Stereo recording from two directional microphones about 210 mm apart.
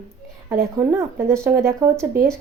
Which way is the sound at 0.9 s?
10° right (ahead or behind).